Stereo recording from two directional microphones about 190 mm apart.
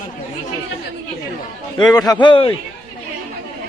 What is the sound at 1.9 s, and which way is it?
Speech, 20° left (ahead or behind).